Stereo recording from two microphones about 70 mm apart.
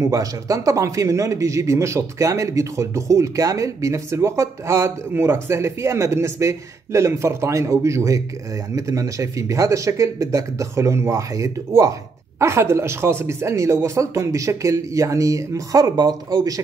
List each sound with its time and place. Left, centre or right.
0.0 s speech: right